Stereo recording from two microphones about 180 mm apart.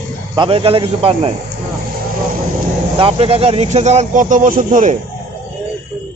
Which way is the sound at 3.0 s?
35° right (ahead or behind).